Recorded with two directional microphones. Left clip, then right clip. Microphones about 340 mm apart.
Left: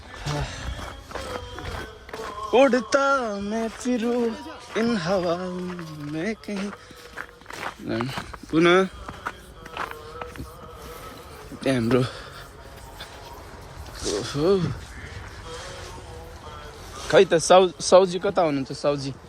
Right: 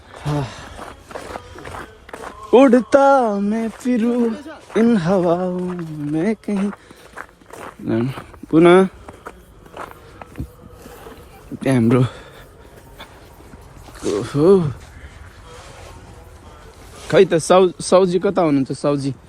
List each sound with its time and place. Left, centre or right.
0.2 s speech: centre
2.6 s speech: centre
7.2 s walk: centre
11.6 s speech: centre
14.1 s speech: centre
17.1 s speech: centre